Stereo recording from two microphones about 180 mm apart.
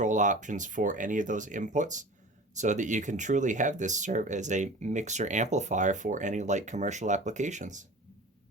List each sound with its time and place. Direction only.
0.0 s speech: 45° right (ahead or behind)